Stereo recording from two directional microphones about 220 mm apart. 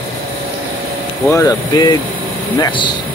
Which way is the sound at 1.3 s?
15° left (ahead or behind).